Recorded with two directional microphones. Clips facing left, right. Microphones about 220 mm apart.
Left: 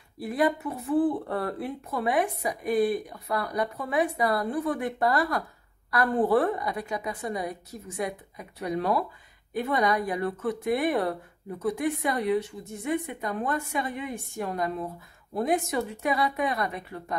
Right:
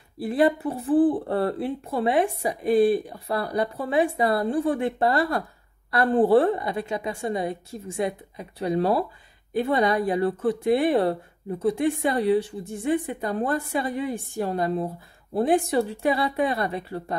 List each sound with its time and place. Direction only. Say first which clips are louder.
0.2 s speech: right 4 dB; 30° right (ahead or behind)